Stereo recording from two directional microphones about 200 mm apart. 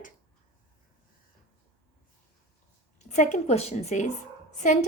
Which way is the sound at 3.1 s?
35° left (ahead or behind).